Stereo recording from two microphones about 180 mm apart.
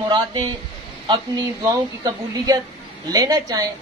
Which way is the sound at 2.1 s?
20° right (ahead or behind).